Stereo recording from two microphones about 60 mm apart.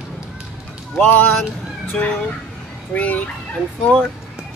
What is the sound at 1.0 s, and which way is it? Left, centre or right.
Speech, left.